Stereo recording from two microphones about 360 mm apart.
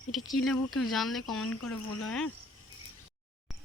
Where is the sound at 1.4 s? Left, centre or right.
Left.